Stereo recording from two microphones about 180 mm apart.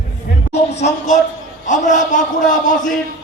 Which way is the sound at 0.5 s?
35° left (ahead or behind).